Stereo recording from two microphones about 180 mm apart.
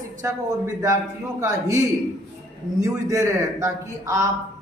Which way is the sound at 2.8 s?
20° right (ahead or behind).